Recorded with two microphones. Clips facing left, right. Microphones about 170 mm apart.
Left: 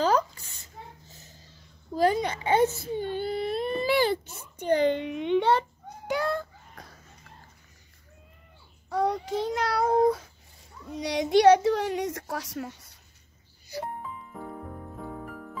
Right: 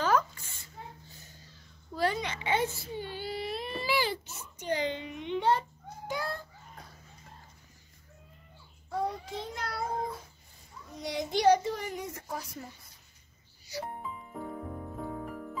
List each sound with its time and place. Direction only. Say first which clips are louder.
0.0 s a sound: left 3 dB; 40° left (ahead or behind)
2.0 s baby cry: left 7 dB; 40° left (ahead or behind); by 6.4 s 80° left
8.8 s a child's voice: left 6 dB; 85° left